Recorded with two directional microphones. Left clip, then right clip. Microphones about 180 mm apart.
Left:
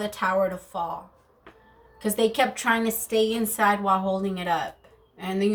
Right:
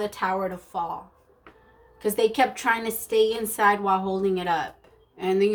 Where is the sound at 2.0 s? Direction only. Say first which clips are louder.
Right 1 dB; 45° right (ahead or behind).